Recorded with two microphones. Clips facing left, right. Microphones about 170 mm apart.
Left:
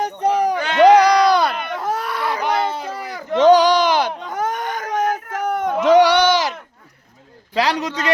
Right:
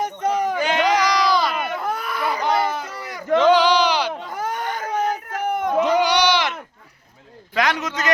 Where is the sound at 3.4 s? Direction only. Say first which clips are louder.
Left 5 dB; 45° left (ahead or behind).